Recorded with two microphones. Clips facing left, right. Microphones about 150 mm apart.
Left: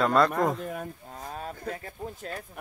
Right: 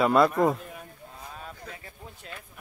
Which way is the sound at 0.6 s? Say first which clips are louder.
Left 8 dB; 45° left (ahead or behind).